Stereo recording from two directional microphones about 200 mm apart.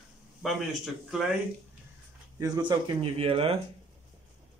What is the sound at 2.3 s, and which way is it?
Speech, 20° right (ahead or behind).